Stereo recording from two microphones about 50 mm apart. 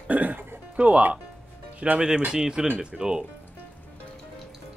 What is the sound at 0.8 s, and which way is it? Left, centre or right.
Speech, right.